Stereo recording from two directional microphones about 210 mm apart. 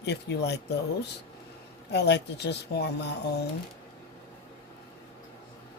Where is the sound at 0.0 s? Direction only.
55° left (ahead or behind).